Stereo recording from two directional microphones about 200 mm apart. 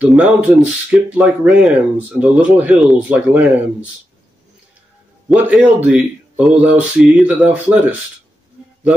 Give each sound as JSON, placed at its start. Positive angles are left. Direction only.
{"t": 0.0, "sound": "speech", "side_deg": -5}
{"t": 5.3, "sound": "speech", "side_deg": -5}